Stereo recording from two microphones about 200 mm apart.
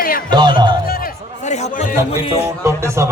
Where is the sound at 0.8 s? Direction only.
45° left (ahead or behind).